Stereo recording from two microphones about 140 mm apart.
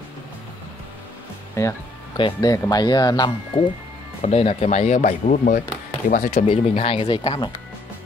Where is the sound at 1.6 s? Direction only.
20° left (ahead or behind).